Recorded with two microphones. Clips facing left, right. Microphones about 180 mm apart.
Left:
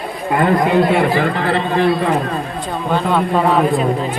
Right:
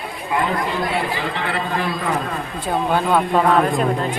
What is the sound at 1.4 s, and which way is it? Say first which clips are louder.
Speech: left 7 dB; 35° left (ahead or behind).